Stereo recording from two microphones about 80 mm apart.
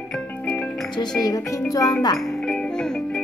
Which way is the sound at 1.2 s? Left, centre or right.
Left.